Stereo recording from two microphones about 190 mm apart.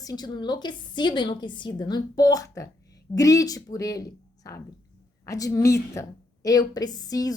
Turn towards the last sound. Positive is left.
turn(degrees=20)  # may be behind; listen again after turning